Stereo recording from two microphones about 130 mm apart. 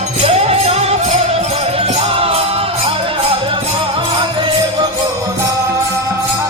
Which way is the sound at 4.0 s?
35° right (ahead or behind).